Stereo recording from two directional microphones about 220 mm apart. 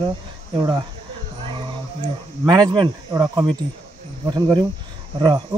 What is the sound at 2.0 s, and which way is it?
Speech, 20° right (ahead or behind).